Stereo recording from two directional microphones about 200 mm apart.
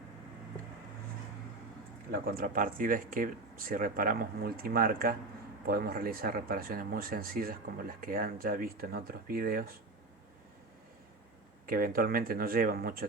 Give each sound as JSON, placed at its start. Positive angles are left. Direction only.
{"t": 2.1, "sound": "speech", "side_deg": -50}
{"t": 11.6, "sound": "speech", "side_deg": -45}